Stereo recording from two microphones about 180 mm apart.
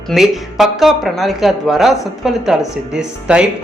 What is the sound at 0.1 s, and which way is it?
Speech, centre (ahead or behind).